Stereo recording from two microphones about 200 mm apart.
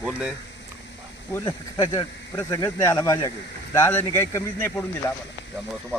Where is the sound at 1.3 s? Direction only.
15° left (ahead or behind).